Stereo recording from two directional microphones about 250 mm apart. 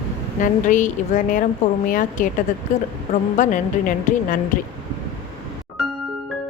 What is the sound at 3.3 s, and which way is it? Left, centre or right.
A woman's voice, left.